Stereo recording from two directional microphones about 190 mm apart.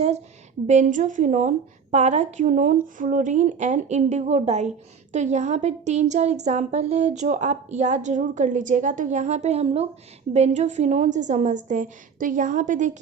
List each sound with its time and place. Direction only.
0.7 s a woman's voice: 40° right (ahead or behind)